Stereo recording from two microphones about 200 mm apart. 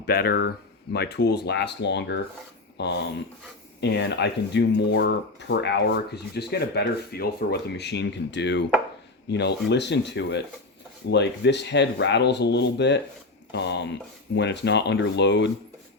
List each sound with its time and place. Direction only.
0.0 s speech: 50° left (ahead or behind)